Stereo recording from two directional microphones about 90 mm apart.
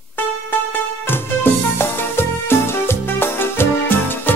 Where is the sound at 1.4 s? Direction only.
25° left (ahead or behind).